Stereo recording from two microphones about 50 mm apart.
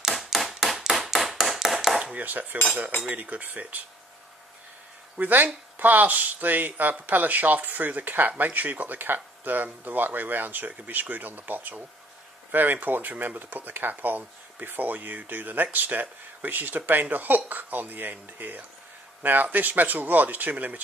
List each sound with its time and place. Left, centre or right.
0.0 s a sound: centre
2.1 s speech: right
5.1 s speech: right